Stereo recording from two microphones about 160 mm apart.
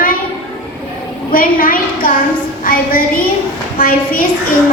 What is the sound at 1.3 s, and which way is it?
A woman's voice, 65° left (ahead or behind).